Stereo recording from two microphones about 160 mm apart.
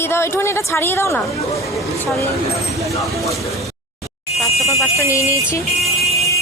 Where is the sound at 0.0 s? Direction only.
15° left (ahead or behind).